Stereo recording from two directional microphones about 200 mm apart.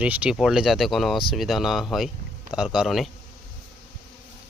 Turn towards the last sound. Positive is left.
turn(degrees=0)  # may be behind; listen again after turning